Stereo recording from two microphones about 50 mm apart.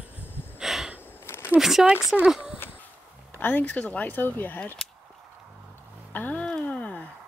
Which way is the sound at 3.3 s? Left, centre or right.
Left.